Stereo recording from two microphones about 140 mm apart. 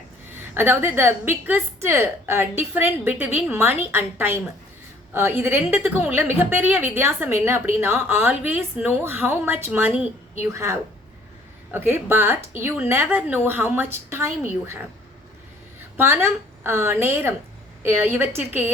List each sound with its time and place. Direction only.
0.3 s a woman's voice: 15° right (ahead or behind)
16.0 s a woman's voice: 15° right (ahead or behind)